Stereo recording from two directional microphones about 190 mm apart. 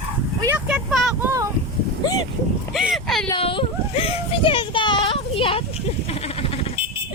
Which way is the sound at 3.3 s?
30° left (ahead or behind).